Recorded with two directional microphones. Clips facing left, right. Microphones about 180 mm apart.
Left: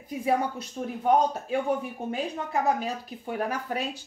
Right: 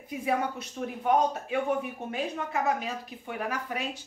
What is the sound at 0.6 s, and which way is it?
Speech, 35° left (ahead or behind).